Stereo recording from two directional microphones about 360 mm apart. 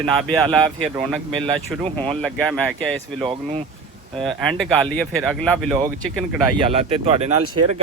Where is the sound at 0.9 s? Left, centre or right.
Centre.